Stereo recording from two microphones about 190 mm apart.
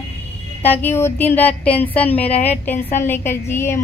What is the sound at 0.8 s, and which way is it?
Speech, 10° left (ahead or behind).